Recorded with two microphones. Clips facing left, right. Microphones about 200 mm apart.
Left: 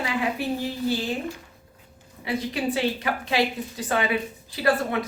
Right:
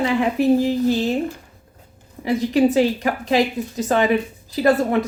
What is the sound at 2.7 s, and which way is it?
A woman's voice, 40° right (ahead or behind).